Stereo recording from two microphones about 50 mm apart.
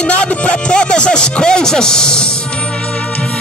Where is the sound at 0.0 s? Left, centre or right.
Left.